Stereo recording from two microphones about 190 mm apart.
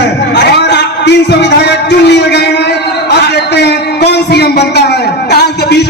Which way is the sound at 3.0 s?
60° left (ahead or behind).